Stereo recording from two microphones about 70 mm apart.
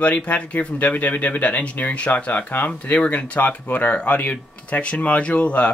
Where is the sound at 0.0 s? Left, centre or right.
Left.